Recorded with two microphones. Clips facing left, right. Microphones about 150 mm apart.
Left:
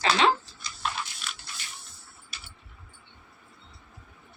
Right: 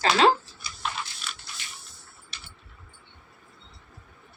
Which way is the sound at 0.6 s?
Centre (ahead or behind).